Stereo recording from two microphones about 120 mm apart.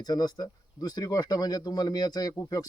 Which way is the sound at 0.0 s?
35° left (ahead or behind).